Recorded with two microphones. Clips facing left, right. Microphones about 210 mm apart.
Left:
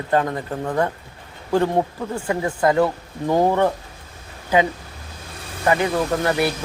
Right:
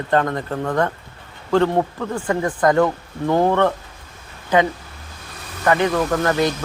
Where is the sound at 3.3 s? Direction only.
15° left (ahead or behind).